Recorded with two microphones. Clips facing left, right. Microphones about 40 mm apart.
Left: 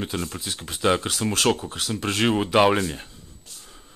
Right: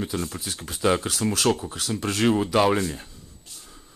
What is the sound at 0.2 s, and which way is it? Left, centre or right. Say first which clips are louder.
Speech: even; centre.